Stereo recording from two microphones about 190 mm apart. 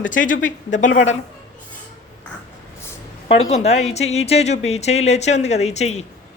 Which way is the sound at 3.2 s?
35° left (ahead or behind).